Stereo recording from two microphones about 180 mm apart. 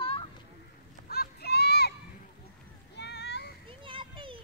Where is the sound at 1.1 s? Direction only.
60° left (ahead or behind).